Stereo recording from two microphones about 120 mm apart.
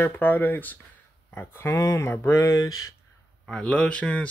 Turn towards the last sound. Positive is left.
turn(degrees=10)  # may be behind; listen again after turning